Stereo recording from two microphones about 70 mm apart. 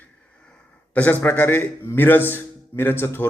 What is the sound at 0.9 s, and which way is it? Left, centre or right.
A man's voice, left.